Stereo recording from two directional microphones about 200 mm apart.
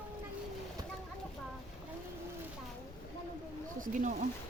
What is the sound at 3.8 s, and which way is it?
Speech, 40° right (ahead or behind).